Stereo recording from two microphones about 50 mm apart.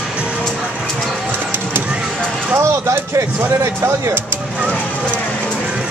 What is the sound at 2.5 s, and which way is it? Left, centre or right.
Speech, right.